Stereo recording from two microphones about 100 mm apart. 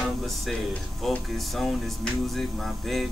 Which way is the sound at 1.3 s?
Centre (ahead or behind).